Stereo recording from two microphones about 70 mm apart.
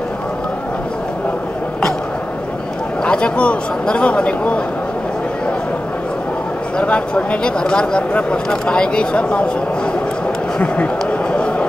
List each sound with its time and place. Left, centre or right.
3.1 s speech: centre
6.8 s speech: centre
10.6 s speech: centre